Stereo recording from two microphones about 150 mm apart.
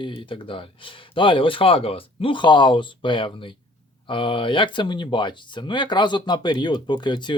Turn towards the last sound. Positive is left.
turn(degrees=30)  # may be behind; listen again after turning